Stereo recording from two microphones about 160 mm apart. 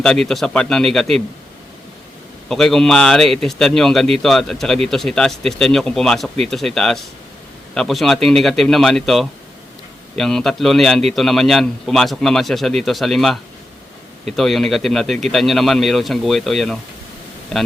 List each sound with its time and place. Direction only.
0.0 s a man's voice: 5° left (ahead or behind)
2.5 s a man's voice: centre (ahead or behind)